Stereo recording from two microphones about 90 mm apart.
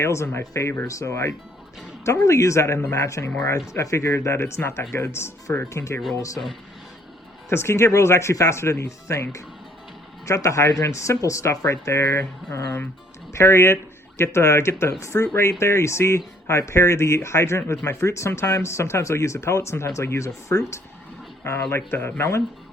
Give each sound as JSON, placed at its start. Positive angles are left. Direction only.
{"t": 0.0, "sound": "speech", "side_deg": 30}
{"t": 7.5, "sound": "speech", "side_deg": 30}
{"t": 10.2, "sound": "speech", "side_deg": 35}